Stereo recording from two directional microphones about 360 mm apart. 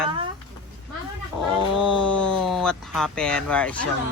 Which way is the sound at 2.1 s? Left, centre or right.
Centre.